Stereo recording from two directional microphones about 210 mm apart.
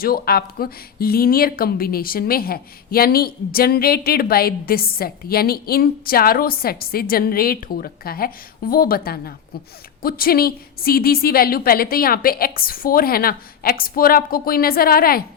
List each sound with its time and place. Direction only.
0.0 s speech: 45° left (ahead or behind)